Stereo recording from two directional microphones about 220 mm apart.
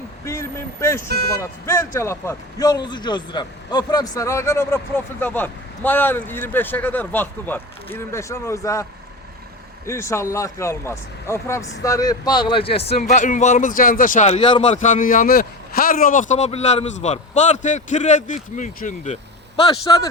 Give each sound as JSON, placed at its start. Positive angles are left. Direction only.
{"t": 0.3, "sound": "speech", "side_deg": 15}
{"t": 1.0, "sound": "speech", "side_deg": -45}
{"t": 1.4, "sound": "a man's voice", "side_deg": 10}
{"t": 14.8, "sound": "a man's voice", "side_deg": 35}